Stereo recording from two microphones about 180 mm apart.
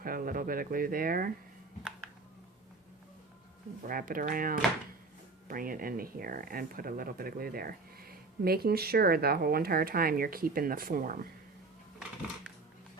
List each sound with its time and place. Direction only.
0.0 s speech: 55° right (ahead or behind)
3.8 s speech: 50° right (ahead or behind)